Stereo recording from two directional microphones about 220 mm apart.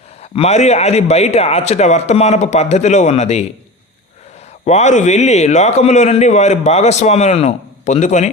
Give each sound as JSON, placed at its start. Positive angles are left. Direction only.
{"t": 0.2, "sound": "a man's voice", "side_deg": 30}
{"t": 4.6, "sound": "a man's voice", "side_deg": 30}